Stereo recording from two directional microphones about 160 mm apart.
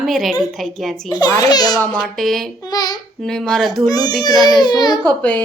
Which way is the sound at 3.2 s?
5° left (ahead or behind).